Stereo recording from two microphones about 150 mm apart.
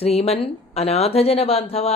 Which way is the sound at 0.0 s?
45° left (ahead or behind).